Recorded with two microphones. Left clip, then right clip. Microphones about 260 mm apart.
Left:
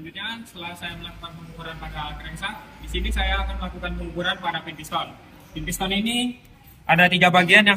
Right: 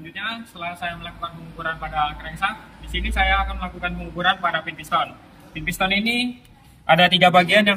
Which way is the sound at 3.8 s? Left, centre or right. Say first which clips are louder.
Right 5 dB; centre.